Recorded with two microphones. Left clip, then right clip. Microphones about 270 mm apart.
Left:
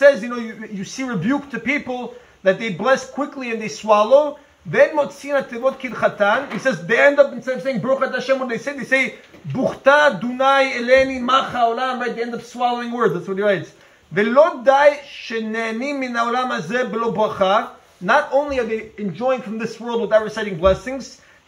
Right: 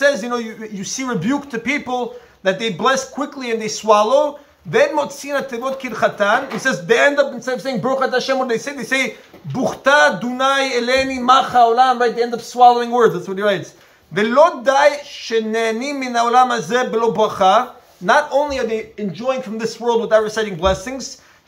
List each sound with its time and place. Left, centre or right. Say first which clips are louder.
0.0 s speech: left 2 dB; centre